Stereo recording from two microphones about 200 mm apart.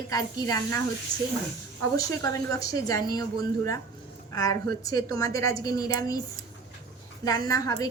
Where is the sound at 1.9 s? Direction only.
15° left (ahead or behind).